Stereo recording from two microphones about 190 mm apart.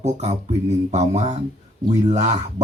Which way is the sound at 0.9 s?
35° right (ahead or behind).